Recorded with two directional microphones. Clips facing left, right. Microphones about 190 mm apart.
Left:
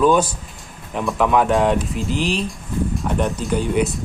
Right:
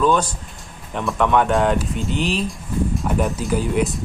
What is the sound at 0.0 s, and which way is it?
Speech, 10° left (ahead or behind).